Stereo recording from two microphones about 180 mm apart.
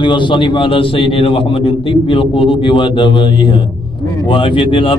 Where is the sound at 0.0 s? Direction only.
25° left (ahead or behind).